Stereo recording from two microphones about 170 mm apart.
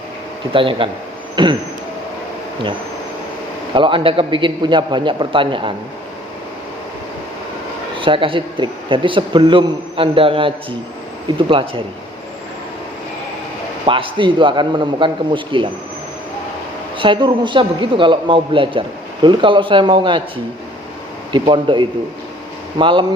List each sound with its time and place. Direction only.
0.5 s a man's voice: 30° right (ahead or behind)
3.8 s a man's voice: 30° right (ahead or behind)
7.9 s a man's voice: 30° right (ahead or behind)
13.8 s a man's voice: 30° right (ahead or behind)
17.0 s a man's voice: 30° right (ahead or behind)
21.3 s a man's voice: 30° right (ahead or behind)